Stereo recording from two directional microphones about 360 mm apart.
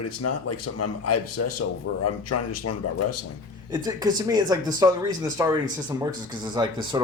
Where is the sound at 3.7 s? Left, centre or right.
Centre.